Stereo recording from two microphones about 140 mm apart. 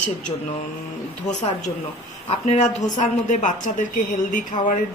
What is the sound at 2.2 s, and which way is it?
A woman's voice, 55° left (ahead or behind).